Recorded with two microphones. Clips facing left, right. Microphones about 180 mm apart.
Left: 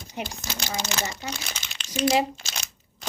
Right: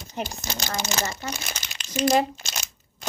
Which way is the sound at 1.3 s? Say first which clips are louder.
Right 1 dB; 5° right (ahead or behind).